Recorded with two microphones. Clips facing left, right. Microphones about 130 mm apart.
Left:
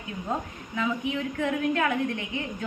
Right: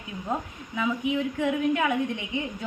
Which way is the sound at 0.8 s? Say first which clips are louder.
Right 2 dB; 10° right (ahead or behind).